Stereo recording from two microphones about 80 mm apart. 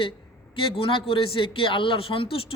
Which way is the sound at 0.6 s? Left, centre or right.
Left.